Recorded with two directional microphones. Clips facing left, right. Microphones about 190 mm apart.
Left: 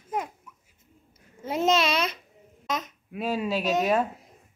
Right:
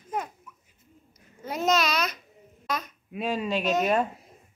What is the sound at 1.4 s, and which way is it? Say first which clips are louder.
Speech: left 2 dB; 25° left (ahead or behind).